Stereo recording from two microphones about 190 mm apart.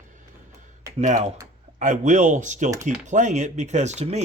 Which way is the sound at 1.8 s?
40° right (ahead or behind).